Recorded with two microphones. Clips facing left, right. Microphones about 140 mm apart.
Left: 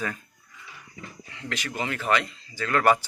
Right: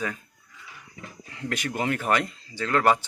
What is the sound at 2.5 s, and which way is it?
Speech, 25° right (ahead or behind).